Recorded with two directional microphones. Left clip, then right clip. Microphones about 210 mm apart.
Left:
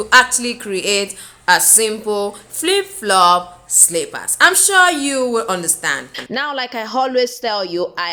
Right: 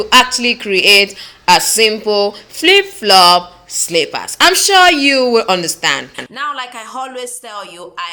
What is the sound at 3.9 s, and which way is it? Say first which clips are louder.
A woman's voice: right 6 dB; 10° right (ahead or behind).